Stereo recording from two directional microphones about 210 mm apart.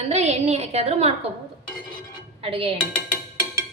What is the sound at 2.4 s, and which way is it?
Speech, 25° right (ahead or behind).